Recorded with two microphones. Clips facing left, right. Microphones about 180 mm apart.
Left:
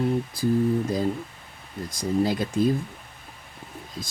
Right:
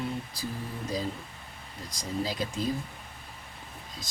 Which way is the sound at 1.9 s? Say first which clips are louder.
Left 9 dB; 55° left (ahead or behind).